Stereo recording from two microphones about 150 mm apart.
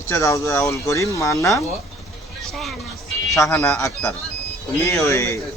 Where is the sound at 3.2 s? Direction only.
20° left (ahead or behind).